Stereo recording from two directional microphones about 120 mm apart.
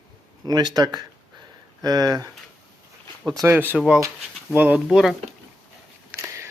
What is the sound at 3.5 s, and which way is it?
Speech, 15° right (ahead or behind).